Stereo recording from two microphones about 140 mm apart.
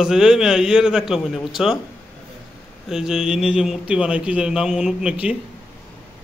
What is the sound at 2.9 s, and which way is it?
A man's voice, 5° right (ahead or behind).